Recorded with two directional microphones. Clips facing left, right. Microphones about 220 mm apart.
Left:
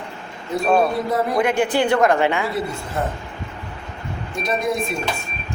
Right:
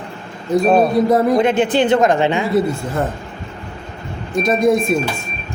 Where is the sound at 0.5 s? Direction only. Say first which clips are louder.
Right 5 dB; 20° right (ahead or behind).